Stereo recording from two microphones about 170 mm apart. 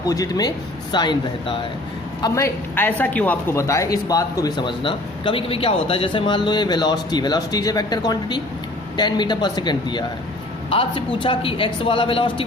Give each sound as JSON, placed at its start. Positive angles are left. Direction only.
{"t": 0.0, "sound": "a woman's voice", "side_deg": 20}